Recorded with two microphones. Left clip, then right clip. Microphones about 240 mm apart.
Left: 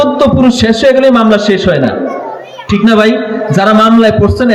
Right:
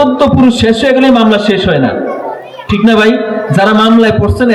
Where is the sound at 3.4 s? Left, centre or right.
Left.